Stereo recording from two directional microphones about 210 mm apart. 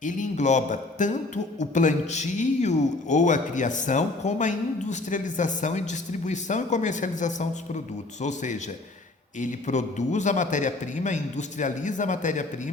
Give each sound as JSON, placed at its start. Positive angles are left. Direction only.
{"t": 0.0, "sound": "a man's voice", "side_deg": 35}